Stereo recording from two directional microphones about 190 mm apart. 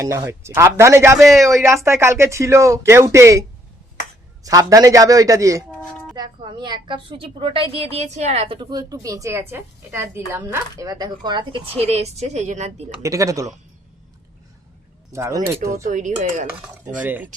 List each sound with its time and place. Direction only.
0.0 s speech: 15° right (ahead or behind)
1.2 s speech: centre (ahead or behind)
1.6 s speech: 15° right (ahead or behind)
4.4 s a woman's voice: 20° right (ahead or behind); by 12.8 s 35° right (ahead or behind)
13.0 s speech: 15° right (ahead or behind)
15.1 s speech: 15° right (ahead or behind)
15.8 s speech: 40° right (ahead or behind)
16.5 s speech: 10° right (ahead or behind)